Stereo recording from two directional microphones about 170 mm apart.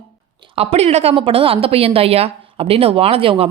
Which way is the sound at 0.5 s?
35° right (ahead or behind).